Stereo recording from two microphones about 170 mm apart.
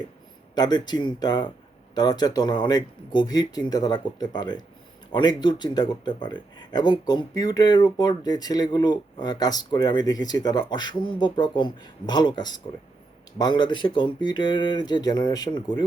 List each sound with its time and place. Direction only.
0.5 s speech: 25° left (ahead or behind)